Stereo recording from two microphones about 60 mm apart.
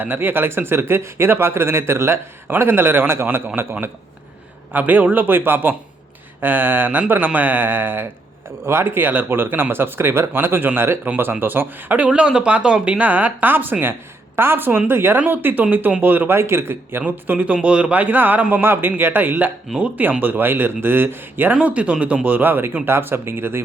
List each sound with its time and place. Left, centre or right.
0.0 s speech: right
4.7 s speech: right
16.3 s a man's voice: right
17.1 s speech: right
21.5 s speech: right